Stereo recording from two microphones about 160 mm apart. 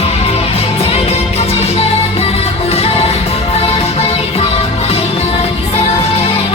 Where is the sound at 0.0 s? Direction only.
40° left (ahead or behind).